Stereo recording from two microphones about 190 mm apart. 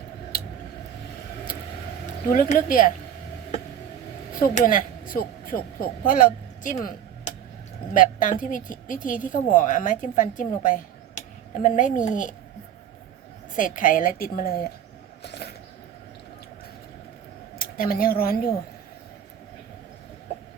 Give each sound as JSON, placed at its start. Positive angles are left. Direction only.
{"t": 0.3, "sound": "a sound", "side_deg": 50}
{"t": 2.3, "sound": "speech", "side_deg": 45}
{"t": 4.4, "sound": "speech", "side_deg": 45}
{"t": 13.6, "sound": "speech", "side_deg": 45}
{"t": 15.2, "sound": "a sound", "side_deg": 60}
{"t": 17.6, "sound": "speech", "side_deg": 50}